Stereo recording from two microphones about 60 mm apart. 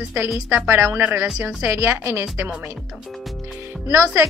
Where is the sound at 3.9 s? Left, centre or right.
Right.